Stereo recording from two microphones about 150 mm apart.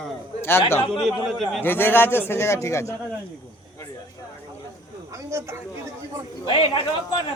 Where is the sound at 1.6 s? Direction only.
15° left (ahead or behind).